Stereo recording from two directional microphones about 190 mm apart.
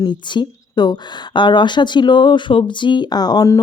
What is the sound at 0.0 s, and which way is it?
A woman's voice, 25° left (ahead or behind).